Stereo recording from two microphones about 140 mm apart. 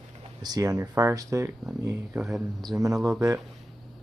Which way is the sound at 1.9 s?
5° right (ahead or behind).